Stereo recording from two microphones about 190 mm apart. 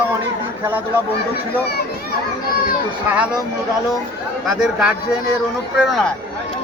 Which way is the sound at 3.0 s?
5° right (ahead or behind).